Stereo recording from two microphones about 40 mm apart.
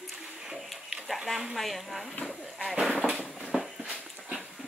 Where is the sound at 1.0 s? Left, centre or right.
Centre.